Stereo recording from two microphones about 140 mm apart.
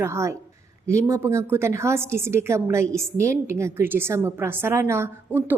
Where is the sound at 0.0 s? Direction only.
20° right (ahead or behind).